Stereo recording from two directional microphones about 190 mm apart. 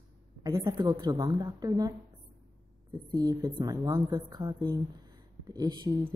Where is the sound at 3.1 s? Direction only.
20° right (ahead or behind).